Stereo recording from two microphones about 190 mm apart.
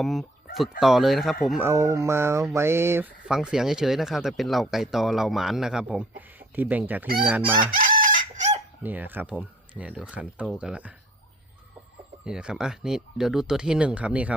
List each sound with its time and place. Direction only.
0.0 s speech: centre (ahead or behind)
1.6 s speech: 15° right (ahead or behind)
7.6 s chicken: 45° right (ahead or behind)
8.8 s speech: 10° right (ahead or behind)
12.2 s speech: 5° right (ahead or behind)